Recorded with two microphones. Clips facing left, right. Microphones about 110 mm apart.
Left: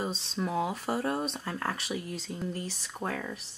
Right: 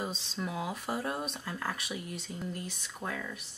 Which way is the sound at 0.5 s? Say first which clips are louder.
Left 5 dB; 30° left (ahead or behind).